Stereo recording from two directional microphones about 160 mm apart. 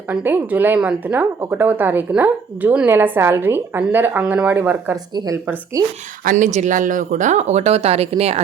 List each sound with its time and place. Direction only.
0.1 s a woman's voice: 10° right (ahead or behind)
5.1 s a woman's voice: 25° right (ahead or behind)
6.2 s speech: 50° right (ahead or behind)